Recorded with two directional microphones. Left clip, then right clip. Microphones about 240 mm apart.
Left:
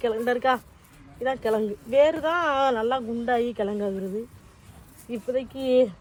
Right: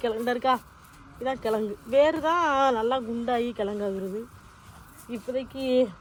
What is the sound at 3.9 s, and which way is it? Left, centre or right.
A man's voice, centre.